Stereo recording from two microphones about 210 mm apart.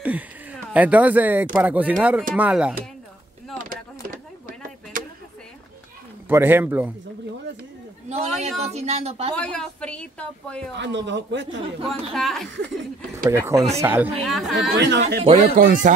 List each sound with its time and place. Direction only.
0.0 s a woman's voice: 5° right (ahead or behind)
3.6 s a sound: 40° right (ahead or behind)
6.2 s speech: 10° right (ahead or behind)
8.1 s a man's voice: 30° right (ahead or behind)
9.3 s a woman's voice: 5° left (ahead or behind)
10.8 s speech: 55° right (ahead or behind)
11.9 s a woman's voice: centre (ahead or behind)
13.3 s a woman's voice: 10° right (ahead or behind)
14.8 s speech: 55° right (ahead or behind)
15.2 s a man's voice: 40° right (ahead or behind)